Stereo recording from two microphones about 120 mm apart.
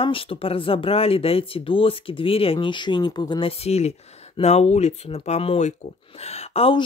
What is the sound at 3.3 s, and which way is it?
Speech, 50° left (ahead or behind).